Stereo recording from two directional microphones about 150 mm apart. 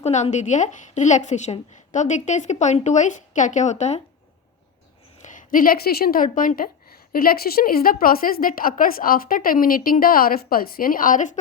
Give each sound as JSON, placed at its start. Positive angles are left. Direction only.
{"t": 0.0, "sound": "a woman's voice", "side_deg": 50}
{"t": 5.2, "sound": "a woman's voice", "side_deg": 60}